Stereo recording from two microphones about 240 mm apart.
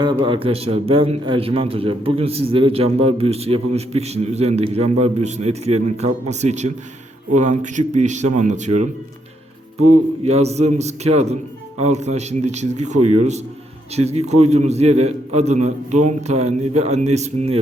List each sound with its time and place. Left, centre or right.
0.0 s a man's voice: centre
10.2 s a man's voice: right